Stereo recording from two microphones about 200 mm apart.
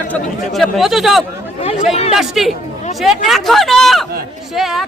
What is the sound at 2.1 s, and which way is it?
Speech, centre (ahead or behind).